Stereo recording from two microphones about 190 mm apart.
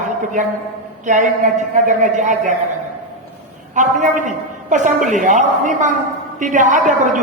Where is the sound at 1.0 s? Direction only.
40° right (ahead or behind).